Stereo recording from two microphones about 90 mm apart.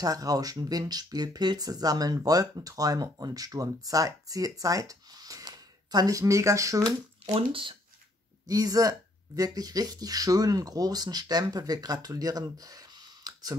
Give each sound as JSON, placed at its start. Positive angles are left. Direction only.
{"t": 0.0, "sound": "speech", "side_deg": -45}
{"t": 7.3, "sound": "speech", "side_deg": -75}
{"t": 8.5, "sound": "speech", "side_deg": -40}